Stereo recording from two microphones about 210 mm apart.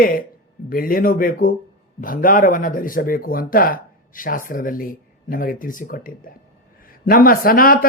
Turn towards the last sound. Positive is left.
turn(degrees=45)  # may be behind; listen again after turning